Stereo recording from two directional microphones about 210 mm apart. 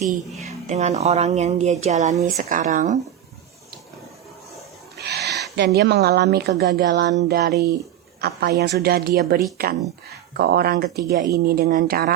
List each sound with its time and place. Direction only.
0.3 s speech: 30° right (ahead or behind)
4.9 s speech: 50° right (ahead or behind)